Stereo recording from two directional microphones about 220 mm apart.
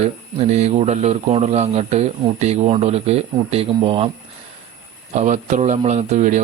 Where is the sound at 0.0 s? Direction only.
30° right (ahead or behind).